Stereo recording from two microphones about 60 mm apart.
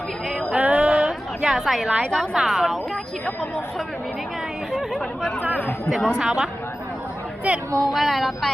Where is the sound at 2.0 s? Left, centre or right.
Centre.